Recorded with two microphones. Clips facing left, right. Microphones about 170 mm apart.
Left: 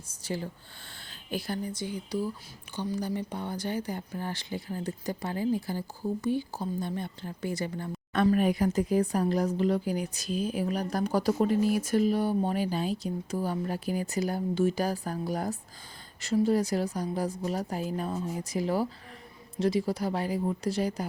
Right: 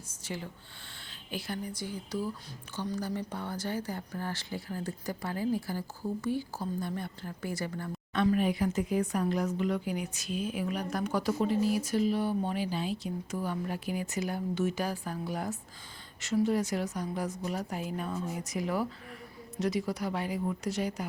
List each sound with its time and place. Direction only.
0.1 s a sound: 35° left (ahead or behind)
1.3 s speech: 35° left (ahead or behind)
1.7 s speech: 20° left (ahead or behind)
8.1 s speech: 50° left (ahead or behind)